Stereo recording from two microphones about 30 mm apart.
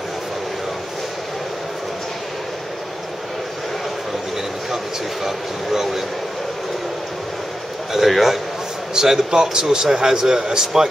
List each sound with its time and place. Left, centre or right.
5.2 s speech: centre
7.9 s a man's voice: centre
8.9 s a man's voice: centre